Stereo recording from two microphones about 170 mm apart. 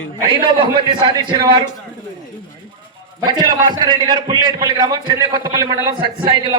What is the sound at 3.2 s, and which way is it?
A man's voice, 25° right (ahead or behind).